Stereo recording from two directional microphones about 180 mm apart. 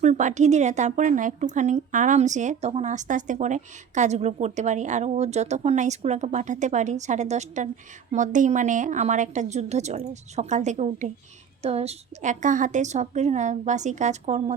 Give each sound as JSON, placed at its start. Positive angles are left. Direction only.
{"t": 0.0, "sound": "a woman's voice", "side_deg": -40}